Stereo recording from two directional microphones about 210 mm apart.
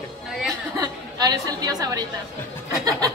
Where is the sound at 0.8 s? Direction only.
20° right (ahead or behind).